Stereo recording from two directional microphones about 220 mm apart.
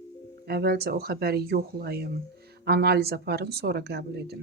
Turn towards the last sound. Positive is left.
turn(degrees=-45)  # may be behind; listen again after turning